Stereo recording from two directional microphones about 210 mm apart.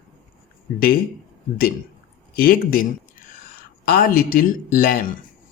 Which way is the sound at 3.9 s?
45° left (ahead or behind).